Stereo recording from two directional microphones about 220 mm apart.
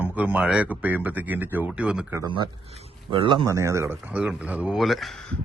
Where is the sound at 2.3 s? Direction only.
20° right (ahead or behind); by 5.3 s 5° left (ahead or behind).